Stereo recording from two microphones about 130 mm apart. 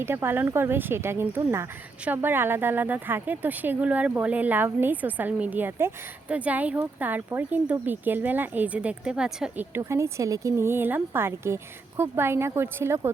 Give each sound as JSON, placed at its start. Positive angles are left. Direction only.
{"t": 0.0, "sound": "speech", "side_deg": -20}
{"t": 9.7, "sound": "speech", "side_deg": -20}